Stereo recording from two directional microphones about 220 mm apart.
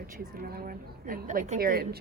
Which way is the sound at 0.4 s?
40° right (ahead or behind).